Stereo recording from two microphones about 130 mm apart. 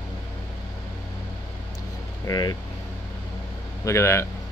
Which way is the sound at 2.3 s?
30° left (ahead or behind).